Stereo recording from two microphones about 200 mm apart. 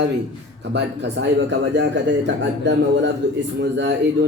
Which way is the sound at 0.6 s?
60° right (ahead or behind).